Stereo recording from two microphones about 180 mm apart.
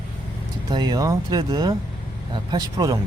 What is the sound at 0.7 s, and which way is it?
Speech, 25° right (ahead or behind).